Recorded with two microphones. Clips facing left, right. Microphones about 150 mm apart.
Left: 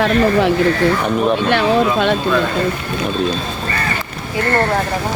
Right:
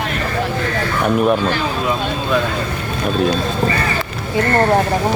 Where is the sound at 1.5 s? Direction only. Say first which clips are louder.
Left 5 dB; 75° left (ahead or behind).